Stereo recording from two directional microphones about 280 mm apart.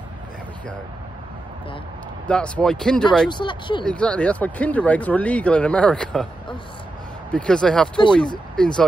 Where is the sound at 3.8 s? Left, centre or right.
Centre.